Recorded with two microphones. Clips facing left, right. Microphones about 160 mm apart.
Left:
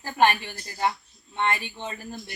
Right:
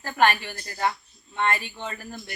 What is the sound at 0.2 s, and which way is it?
A woman's voice, 20° left (ahead or behind).